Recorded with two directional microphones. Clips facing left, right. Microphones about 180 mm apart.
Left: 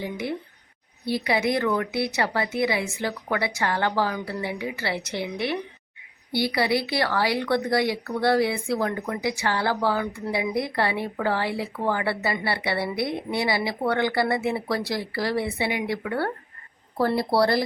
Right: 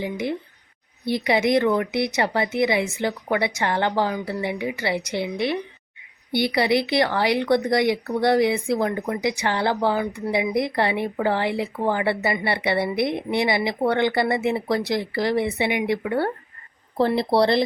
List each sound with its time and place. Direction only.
1.0 s speech: 20° right (ahead or behind)
6.3 s speech: 20° right (ahead or behind)